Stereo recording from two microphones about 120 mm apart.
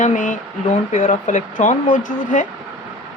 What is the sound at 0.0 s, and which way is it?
Speech, 90° left.